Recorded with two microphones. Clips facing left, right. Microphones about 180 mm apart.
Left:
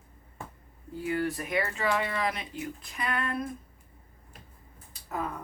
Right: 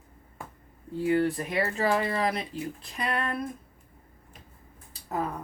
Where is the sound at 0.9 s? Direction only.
30° right (ahead or behind).